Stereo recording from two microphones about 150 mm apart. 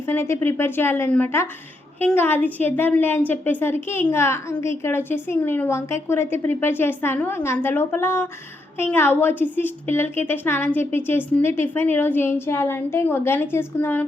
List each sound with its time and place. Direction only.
0.0 s a woman's voice: 15° left (ahead or behind)